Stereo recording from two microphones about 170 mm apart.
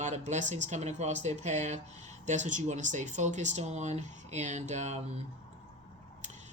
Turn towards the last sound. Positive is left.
turn(degrees=-45)  # may be behind; listen again after turning